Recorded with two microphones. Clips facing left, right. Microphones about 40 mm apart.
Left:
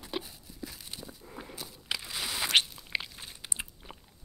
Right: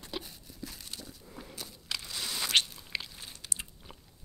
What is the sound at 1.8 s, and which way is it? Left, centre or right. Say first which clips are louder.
Crunch: left 3 dB; centre.